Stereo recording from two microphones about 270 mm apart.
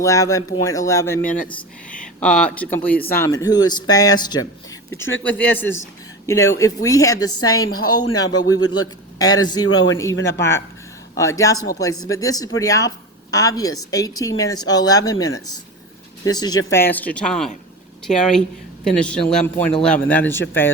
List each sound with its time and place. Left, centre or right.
0.0 s speech: centre
7.3 s a woman's voice: left
8.2 s speech: centre
8.6 s a woman's voice: left
11.2 s speech: centre